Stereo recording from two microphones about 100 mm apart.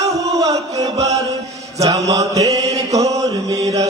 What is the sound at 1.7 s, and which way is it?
Mantra, 35° right (ahead or behind).